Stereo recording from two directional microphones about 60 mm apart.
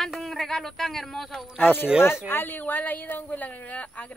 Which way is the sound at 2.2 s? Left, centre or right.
Left.